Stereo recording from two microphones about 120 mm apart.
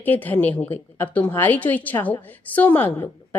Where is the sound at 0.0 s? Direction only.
15° left (ahead or behind).